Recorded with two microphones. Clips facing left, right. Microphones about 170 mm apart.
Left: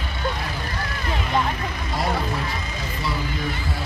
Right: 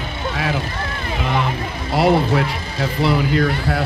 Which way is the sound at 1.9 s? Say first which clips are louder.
Right 11 dB; 75° right (ahead or behind).